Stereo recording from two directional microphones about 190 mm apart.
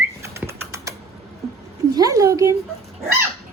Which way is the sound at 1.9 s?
20° right (ahead or behind).